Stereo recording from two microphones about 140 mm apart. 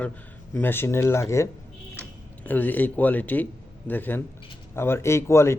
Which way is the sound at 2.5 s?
10° left (ahead or behind).